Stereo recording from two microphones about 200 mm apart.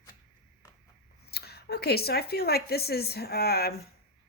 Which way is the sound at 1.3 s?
55° left (ahead or behind).